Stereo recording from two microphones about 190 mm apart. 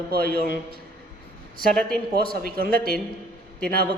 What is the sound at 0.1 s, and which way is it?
Speech, 55° right (ahead or behind).